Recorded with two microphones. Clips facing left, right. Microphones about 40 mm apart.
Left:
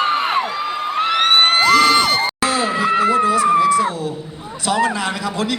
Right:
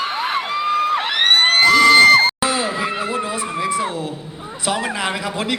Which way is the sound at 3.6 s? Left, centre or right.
Right.